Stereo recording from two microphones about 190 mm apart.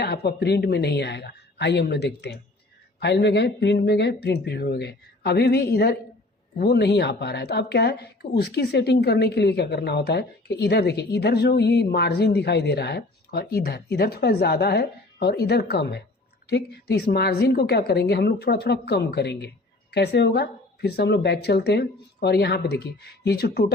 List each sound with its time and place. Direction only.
0.0 s a woman's voice: 60° left (ahead or behind)